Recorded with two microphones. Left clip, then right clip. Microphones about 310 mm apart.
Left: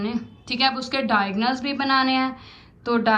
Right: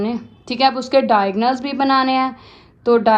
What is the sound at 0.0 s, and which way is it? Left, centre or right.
A woman's voice, centre.